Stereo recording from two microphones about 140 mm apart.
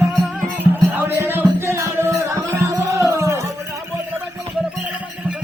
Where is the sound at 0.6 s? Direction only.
15° right (ahead or behind).